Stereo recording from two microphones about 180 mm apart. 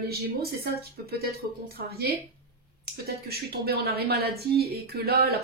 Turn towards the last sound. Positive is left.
turn(degrees=-60)  # may be behind; listen again after turning